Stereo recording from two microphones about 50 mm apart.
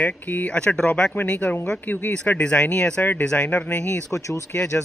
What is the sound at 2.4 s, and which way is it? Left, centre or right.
Speech, left.